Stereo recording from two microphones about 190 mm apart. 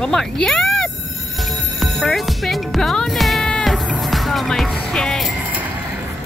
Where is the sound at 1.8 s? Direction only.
Centre (ahead or behind).